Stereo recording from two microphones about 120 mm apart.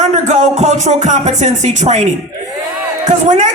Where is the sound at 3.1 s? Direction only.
75° right (ahead or behind).